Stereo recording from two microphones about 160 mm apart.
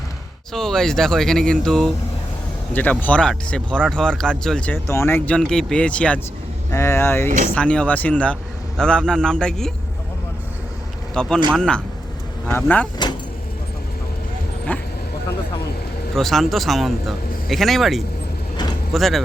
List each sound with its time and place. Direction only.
0.5 s speech: 5° left (ahead or behind)
7.3 s speech: 50° right (ahead or behind)
7.5 s speech: 5° left (ahead or behind)
11.1 s speech: 5° left (ahead or behind)
14.7 s speech: 10° left (ahead or behind)
16.1 s speech: centre (ahead or behind)